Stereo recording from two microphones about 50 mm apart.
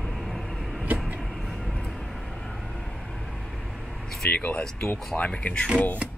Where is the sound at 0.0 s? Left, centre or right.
Centre.